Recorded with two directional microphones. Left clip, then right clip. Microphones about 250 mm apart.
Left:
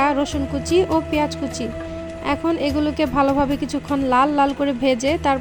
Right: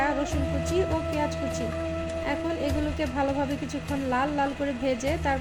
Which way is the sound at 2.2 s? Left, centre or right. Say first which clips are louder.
Left 10 dB; left.